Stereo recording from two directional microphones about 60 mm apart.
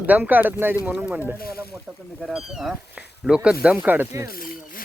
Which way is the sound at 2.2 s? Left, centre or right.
Centre.